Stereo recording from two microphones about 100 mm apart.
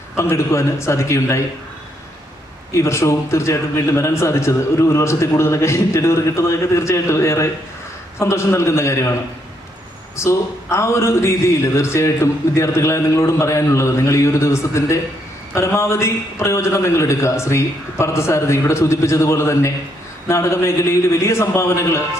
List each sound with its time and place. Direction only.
0.2 s a man's voice: 30° left (ahead or behind)
2.7 s a man's voice: 30° left (ahead or behind)
10.2 s a man's voice: 30° left (ahead or behind)